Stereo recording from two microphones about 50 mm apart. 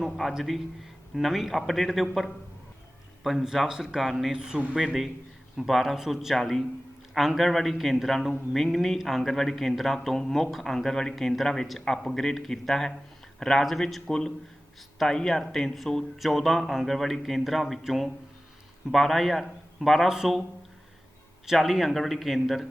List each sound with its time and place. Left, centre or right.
0.0 s speech: centre
4.3 s speech: centre
21.6 s speech: centre